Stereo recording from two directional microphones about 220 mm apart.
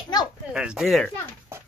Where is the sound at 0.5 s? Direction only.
5° right (ahead or behind).